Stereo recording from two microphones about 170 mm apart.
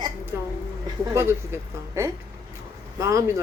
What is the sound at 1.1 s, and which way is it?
Speech, 15° right (ahead or behind).